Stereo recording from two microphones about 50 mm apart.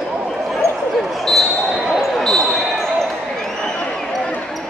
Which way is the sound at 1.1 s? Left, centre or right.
Centre.